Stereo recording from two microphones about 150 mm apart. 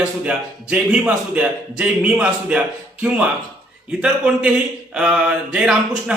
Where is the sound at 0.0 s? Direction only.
5° right (ahead or behind).